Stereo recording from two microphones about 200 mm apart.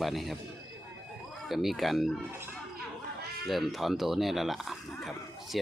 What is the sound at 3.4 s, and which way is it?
Speech, centre (ahead or behind).